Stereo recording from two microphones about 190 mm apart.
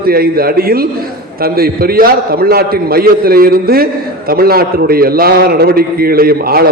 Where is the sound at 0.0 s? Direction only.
50° right (ahead or behind).